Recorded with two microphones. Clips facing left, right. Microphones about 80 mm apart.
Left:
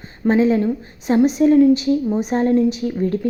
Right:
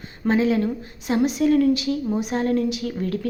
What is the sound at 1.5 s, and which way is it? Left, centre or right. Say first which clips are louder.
A woman's voice: left 6 dB; left.